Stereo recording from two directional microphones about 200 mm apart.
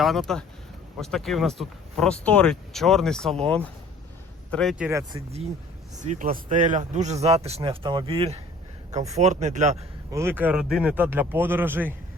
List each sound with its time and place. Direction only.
0.0 s speech: centre (ahead or behind)
4.9 s speech: 15° right (ahead or behind)
6.0 s speech: 40° right (ahead or behind)
10.1 s speech: 15° right (ahead or behind)